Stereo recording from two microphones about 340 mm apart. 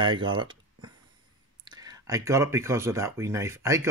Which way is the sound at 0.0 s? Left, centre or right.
Centre.